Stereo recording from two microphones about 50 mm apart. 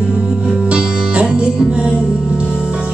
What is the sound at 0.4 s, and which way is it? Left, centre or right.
Music, right.